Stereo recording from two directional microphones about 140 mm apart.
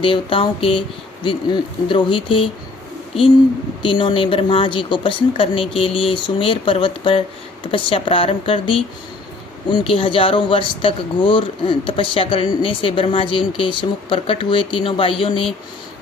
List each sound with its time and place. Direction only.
0.0 s speech: 40° left (ahead or behind)
3.8 s speech: 35° left (ahead or behind)